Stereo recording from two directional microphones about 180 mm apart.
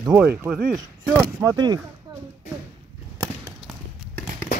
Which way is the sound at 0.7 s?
15° right (ahead or behind).